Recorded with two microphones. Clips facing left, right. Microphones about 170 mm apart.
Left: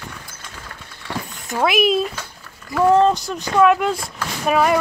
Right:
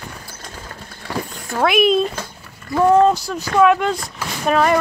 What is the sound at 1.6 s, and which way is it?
Speech, centre (ahead or behind).